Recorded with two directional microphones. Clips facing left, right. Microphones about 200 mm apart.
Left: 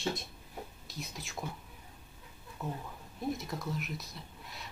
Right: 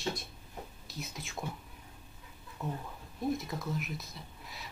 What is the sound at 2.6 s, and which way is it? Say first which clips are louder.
Speech: right 1 dB; centre (ahead or behind).